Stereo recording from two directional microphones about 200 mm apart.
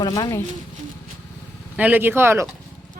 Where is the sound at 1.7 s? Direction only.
10° right (ahead or behind).